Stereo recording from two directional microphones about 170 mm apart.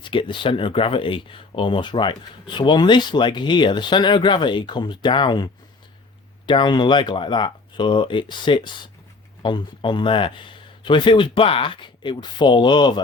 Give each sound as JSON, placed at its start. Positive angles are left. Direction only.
{"t": 0.0, "sound": "speech", "side_deg": 30}